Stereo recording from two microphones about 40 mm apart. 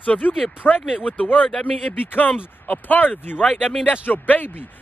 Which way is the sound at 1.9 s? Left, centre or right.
Left.